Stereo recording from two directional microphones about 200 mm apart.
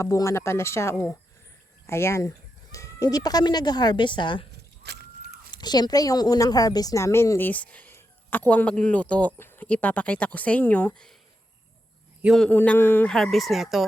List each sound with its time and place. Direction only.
0.0 s speech: 15° left (ahead or behind)
4.8 s horse: 55° right (ahead or behind)
5.5 s speech: 20° left (ahead or behind); by 11.1 s 5° left (ahead or behind)
12.2 s speech: centre (ahead or behind)